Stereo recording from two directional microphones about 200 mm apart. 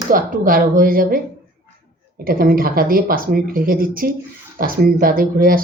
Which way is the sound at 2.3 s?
45° right (ahead or behind).